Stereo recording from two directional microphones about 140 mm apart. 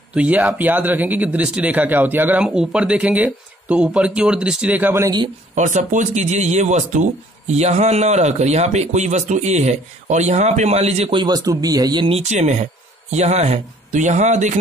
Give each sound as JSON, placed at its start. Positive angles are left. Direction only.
{"t": 0.1, "sound": "speech", "side_deg": -10}
{"t": 5.5, "sound": "speech", "side_deg": -65}
{"t": 11.2, "sound": "speech", "side_deg": -25}
{"t": 12.2, "sound": "speech", "side_deg": -55}